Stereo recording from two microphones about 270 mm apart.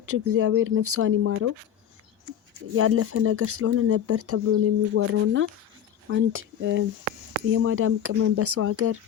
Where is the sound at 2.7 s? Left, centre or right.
Right.